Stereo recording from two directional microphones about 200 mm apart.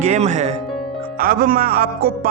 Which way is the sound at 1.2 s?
45° right (ahead or behind).